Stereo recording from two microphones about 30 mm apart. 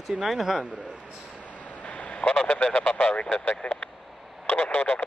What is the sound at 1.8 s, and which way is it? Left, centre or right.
Honk, left.